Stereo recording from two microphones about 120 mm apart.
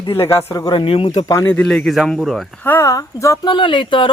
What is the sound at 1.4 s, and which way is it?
A man's voice, 10° left (ahead or behind).